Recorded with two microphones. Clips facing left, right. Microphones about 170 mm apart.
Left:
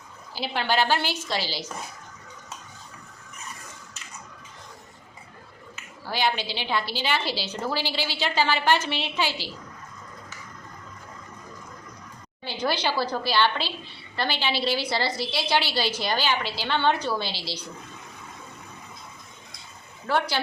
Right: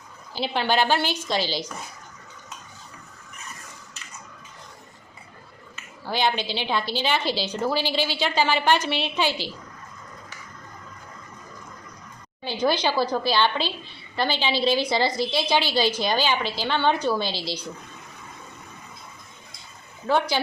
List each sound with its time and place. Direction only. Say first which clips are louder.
0.3 s a woman's voice: right 2 dB; 20° right (ahead or behind)
6.1 s a woman's voice: right 2 dB; 20° right (ahead or behind)
12.5 s a woman's voice: right 4 dB; 15° right (ahead or behind)
20.1 s a woman's voice: right 3 dB; 15° right (ahead or behind)